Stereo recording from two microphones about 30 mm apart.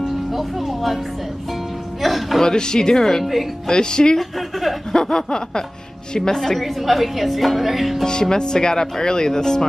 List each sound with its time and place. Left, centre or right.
0.0 s music: centre
2.0 s a man's voice: centre
2.4 s speech: left
4.2 s speech: centre
4.9 s speech: left
6.6 s speech: centre
8.0 s speech: left